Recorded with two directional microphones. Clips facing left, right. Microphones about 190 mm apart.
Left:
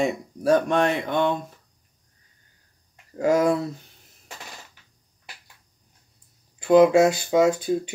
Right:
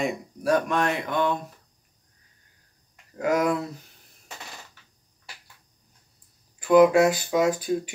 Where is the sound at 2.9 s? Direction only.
25° left (ahead or behind).